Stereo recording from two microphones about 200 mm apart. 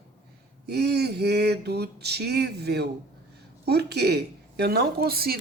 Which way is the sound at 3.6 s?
55° right (ahead or behind).